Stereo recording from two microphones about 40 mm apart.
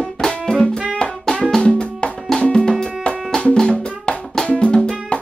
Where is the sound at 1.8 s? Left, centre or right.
Left.